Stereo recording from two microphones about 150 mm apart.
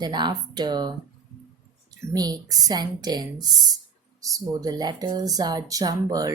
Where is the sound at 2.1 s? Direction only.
25° right (ahead or behind).